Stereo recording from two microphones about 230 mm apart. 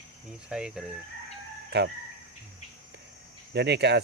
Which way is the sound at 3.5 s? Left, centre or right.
Right.